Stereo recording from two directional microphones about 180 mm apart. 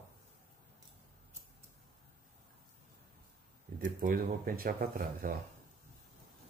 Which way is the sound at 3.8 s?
50° right (ahead or behind).